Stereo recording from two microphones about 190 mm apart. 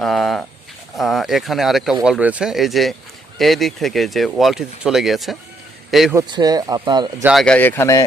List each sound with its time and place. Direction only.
0.0 s speech: centre (ahead or behind)
6.1 s speech: 20° right (ahead or behind)
7.3 s speech: centre (ahead or behind)